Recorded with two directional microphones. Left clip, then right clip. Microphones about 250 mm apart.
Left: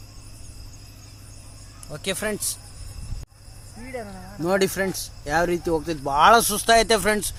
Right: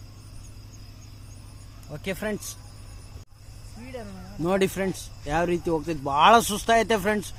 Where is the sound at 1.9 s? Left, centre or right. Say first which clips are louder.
Left 3 dB; centre.